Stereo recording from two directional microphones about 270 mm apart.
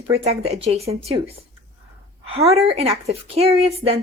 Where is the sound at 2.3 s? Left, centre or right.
Right.